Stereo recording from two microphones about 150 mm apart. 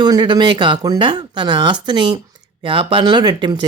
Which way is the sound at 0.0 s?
30° right (ahead or behind).